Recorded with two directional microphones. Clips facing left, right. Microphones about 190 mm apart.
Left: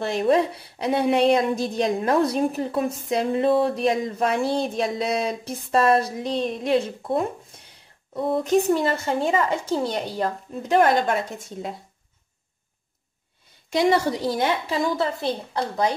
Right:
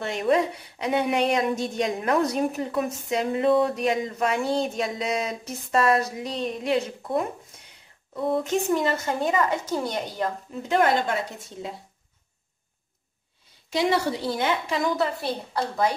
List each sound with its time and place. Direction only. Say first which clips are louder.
0.0 s speech: left 3 dB; 35° left (ahead or behind)
8.5 s speech: left 4 dB; 30° left (ahead or behind)
13.7 s a woman's voice: left 3 dB; 45° left (ahead or behind)
15.0 s a woman's voice: left 2 dB; 20° left (ahead or behind)